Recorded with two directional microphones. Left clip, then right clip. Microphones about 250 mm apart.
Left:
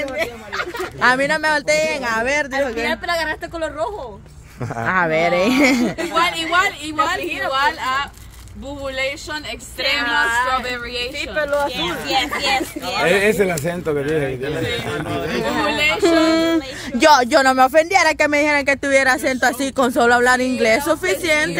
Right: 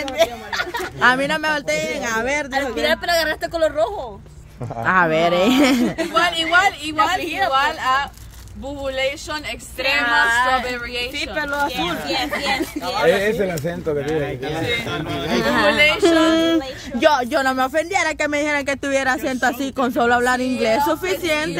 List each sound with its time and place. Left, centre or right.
1.0 s speech: centre
2.9 s a woman's voice: right
4.8 s speech: centre
7.2 s a sound: right
7.5 s speech: centre
10.2 s a sound: right
11.3 s a woman's voice: right
11.7 s speech: centre
13.0 s speech: left
14.9 s a sound: right
16.0 s speech: centre
17.0 s speech: centre